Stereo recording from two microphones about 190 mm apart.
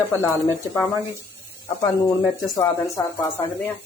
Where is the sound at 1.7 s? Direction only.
20° left (ahead or behind).